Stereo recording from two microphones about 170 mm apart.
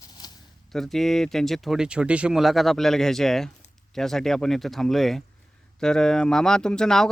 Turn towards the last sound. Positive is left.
turn(degrees=5)  # may be behind; listen again after turning